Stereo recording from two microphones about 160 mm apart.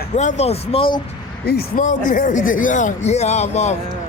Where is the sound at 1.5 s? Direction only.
80° left.